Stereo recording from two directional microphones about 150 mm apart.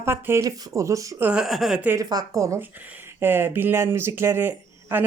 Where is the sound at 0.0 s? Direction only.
15° right (ahead or behind).